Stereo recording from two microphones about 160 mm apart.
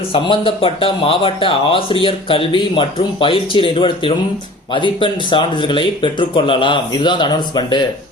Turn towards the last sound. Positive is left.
turn(degrees=25)  # may be behind; listen again after turning